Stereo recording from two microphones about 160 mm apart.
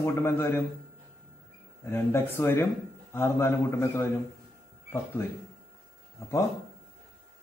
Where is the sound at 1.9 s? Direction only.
15° left (ahead or behind).